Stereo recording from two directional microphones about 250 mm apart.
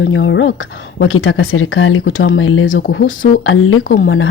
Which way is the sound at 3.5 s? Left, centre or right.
Left.